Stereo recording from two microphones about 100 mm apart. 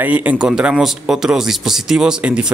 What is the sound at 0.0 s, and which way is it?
A man's voice, 15° right (ahead or behind).